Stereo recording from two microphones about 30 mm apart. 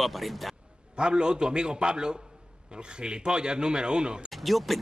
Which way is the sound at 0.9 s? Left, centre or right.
Right.